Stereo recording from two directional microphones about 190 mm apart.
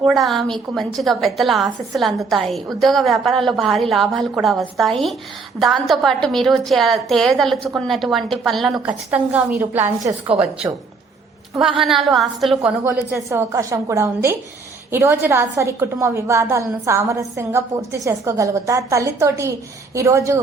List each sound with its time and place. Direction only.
0.0 s a woman's voice: centre (ahead or behind); by 10.2 s 15° right (ahead or behind)
11.8 s a woman's voice: centre (ahead or behind)
12.8 s a woman's voice: 15° right (ahead or behind)